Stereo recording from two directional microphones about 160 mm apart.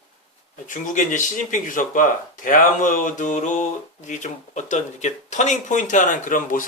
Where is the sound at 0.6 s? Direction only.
55° left (ahead or behind).